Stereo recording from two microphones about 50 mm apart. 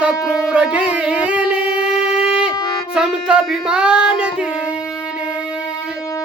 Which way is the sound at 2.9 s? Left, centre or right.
Centre.